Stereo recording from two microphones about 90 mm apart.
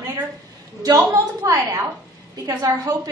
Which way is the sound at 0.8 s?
40° right (ahead or behind).